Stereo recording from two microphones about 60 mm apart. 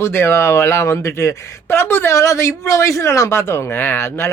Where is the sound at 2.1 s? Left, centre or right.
Left.